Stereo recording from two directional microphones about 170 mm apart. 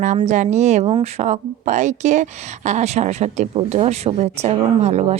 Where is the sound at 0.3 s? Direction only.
45° right (ahead or behind).